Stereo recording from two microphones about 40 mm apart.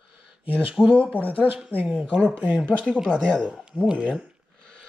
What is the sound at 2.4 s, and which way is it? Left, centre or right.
Speech, right.